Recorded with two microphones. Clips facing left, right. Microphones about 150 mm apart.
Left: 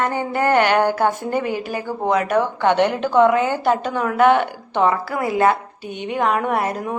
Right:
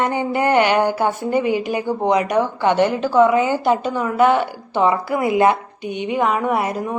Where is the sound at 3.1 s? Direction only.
5° right (ahead or behind).